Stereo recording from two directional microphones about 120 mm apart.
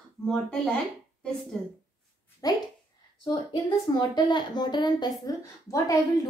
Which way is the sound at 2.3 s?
30° left (ahead or behind).